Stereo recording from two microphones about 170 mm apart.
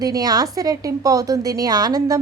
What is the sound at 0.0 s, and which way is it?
A woman's voice, 20° right (ahead or behind).